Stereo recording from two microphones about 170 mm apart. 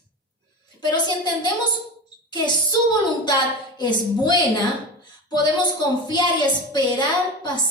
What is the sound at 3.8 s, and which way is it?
Speech, 25° left (ahead or behind).